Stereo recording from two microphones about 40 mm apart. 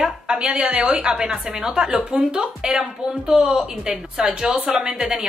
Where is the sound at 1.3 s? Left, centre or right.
Centre.